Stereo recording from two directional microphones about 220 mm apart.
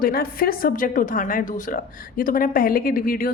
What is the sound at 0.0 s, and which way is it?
A woman's voice, 45° left (ahead or behind).